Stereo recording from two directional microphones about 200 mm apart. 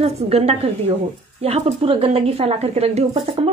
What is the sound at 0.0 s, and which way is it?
A woman's voice, 30° right (ahead or behind).